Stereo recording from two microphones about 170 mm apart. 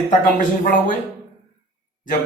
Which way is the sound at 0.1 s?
50° left (ahead or behind).